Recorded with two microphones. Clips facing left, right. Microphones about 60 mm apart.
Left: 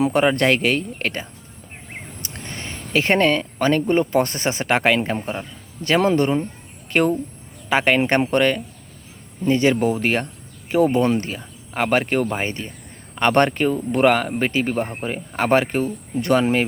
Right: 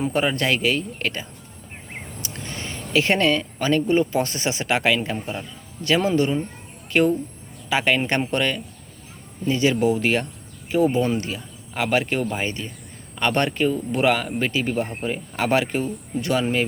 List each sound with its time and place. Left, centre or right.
0.1 s speech: left
6.0 s speech: left
10.7 s speech: left
11.2 s speech: left